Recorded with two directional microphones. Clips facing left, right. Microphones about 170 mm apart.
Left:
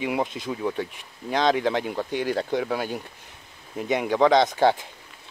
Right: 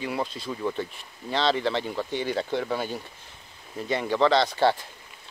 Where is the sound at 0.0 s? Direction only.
20° left (ahead or behind).